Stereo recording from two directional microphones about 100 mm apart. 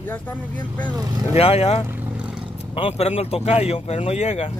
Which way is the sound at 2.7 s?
90° left.